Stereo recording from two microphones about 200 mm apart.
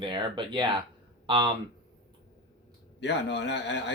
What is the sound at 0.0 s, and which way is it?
Speech, 25° right (ahead or behind).